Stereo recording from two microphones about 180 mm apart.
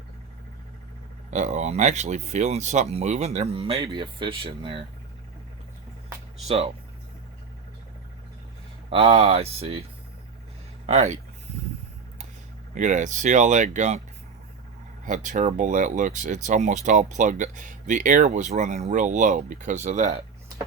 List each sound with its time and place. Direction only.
1.3 s speech: 40° right (ahead or behind)
8.9 s speech: 30° right (ahead or behind)
10.8 s speech: 35° right (ahead or behind)
12.7 s speech: 45° right (ahead or behind)
15.0 s speech: 45° right (ahead or behind)